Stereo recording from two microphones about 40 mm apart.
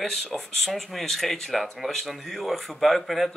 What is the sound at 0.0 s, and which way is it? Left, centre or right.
Speech, centre.